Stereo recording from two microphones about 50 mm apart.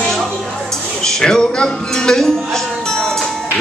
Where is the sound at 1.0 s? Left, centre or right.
Centre.